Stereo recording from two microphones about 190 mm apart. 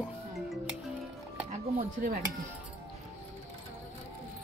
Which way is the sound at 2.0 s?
45° right (ahead or behind).